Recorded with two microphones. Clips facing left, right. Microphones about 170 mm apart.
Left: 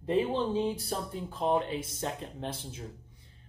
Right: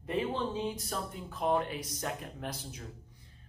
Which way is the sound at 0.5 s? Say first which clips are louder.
Left 5 dB; 30° left (ahead or behind).